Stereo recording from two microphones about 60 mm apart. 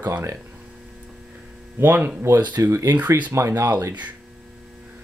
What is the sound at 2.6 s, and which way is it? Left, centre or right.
Speech, right.